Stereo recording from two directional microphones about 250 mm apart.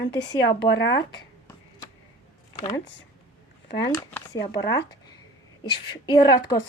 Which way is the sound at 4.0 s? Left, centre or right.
Centre.